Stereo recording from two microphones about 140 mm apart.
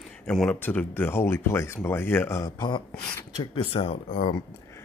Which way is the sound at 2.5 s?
30° left (ahead or behind).